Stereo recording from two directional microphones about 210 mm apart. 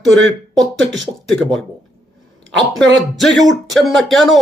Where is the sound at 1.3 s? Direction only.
Centre (ahead or behind).